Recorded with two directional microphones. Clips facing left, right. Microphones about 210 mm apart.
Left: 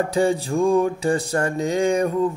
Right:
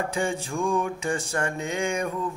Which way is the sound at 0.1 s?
35° left (ahead or behind).